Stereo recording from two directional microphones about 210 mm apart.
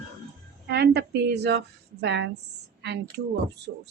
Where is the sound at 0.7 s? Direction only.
50° right (ahead or behind).